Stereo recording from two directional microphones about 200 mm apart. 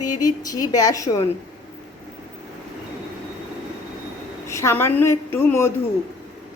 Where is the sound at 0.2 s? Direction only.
20° left (ahead or behind).